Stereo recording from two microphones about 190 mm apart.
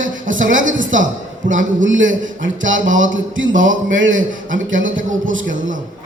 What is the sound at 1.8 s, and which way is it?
A man's voice, 90° right.